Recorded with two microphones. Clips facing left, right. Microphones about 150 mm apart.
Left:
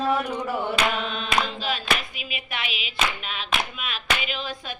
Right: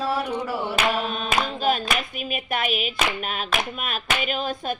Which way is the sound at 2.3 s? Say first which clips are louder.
Right 8 dB; 45° right (ahead or behind).